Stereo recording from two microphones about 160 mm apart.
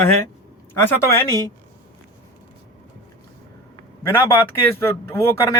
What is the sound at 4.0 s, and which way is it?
Speech, 15° left (ahead or behind).